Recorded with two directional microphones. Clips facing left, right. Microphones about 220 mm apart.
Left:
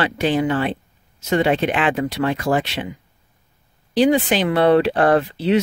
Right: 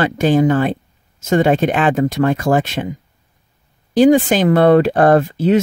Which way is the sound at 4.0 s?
45° right (ahead or behind).